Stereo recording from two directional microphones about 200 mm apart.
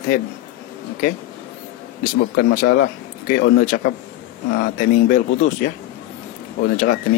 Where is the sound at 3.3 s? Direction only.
45° left (ahead or behind).